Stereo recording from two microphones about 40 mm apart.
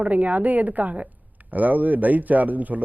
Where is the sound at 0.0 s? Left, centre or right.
Right.